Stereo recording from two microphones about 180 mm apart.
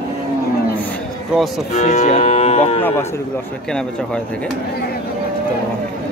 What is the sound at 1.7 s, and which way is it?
Cattle, 40° left (ahead or behind).